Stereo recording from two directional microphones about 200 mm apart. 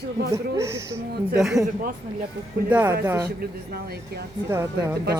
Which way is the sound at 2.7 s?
10° right (ahead or behind).